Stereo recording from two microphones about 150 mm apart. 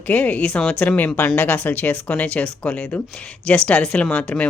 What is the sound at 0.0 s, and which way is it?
Speech, 10° left (ahead or behind).